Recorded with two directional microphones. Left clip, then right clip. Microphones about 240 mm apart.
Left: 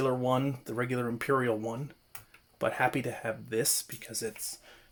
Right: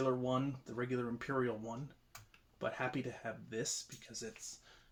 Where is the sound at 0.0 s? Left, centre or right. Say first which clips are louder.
Left 7 dB; left.